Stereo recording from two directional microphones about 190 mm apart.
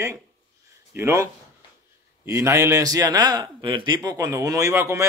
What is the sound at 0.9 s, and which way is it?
A man's voice, 15° right (ahead or behind).